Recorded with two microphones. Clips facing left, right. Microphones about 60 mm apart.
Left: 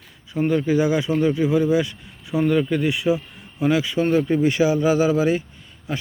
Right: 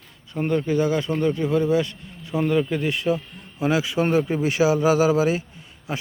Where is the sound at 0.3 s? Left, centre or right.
Centre.